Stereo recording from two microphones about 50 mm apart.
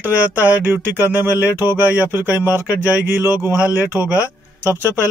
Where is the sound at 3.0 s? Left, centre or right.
Right.